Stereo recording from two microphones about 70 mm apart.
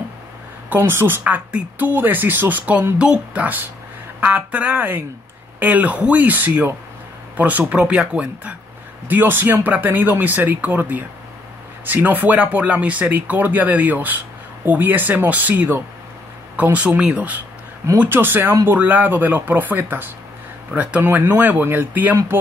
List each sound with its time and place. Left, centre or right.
0.7 s speech: right
20.7 s speech: centre
21.0 s speech: right